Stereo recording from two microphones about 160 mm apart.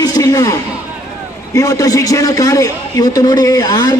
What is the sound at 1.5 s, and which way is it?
A man's voice, 20° left (ahead or behind).